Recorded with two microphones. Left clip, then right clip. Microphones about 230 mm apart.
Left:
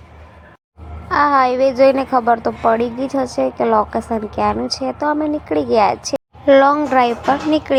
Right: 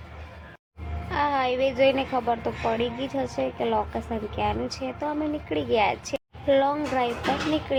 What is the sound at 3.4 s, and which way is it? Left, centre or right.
A woman's voice, left.